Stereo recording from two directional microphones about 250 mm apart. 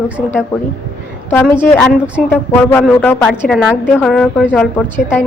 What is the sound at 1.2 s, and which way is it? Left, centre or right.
Speech, centre.